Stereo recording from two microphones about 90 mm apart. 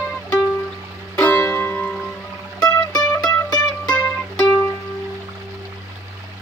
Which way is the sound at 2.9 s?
35° left (ahead or behind).